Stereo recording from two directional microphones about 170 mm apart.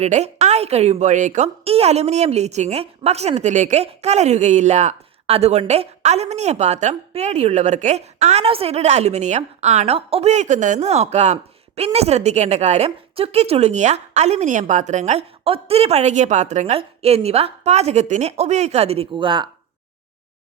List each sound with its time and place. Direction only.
0.0 s a woman's voice: 40° right (ahead or behind)